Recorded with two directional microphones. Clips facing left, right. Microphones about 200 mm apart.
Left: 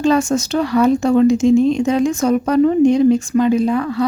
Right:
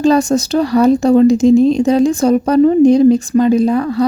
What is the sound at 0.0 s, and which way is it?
Speech, 35° right (ahead or behind).